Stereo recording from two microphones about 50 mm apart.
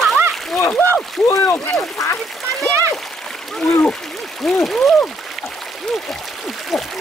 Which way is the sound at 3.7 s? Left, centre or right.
Left.